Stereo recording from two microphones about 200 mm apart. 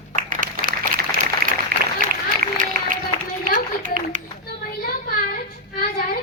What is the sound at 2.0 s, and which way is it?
Run, 45° right (ahead or behind).